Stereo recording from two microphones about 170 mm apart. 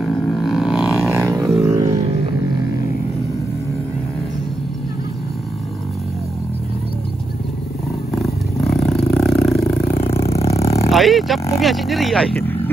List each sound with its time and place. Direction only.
0.0 s a sound: centre (ahead or behind)
1.1 s a sound: 20° right (ahead or behind)
8.1 s roar: centre (ahead or behind)
10.0 s roar: 35° left (ahead or behind)
10.9 s speech: centre (ahead or behind)
12.4 s vehicle: 10° left (ahead or behind)